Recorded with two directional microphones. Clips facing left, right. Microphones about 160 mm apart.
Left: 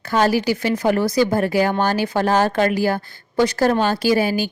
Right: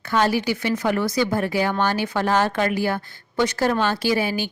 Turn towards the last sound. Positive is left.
turn(degrees=40)  # may be behind; listen again after turning